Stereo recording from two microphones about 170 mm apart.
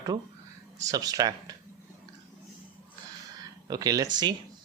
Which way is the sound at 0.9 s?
20° right (ahead or behind).